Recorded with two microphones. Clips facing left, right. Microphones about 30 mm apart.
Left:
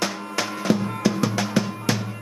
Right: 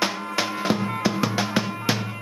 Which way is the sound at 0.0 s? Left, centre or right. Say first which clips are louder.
Right 1 dB; centre.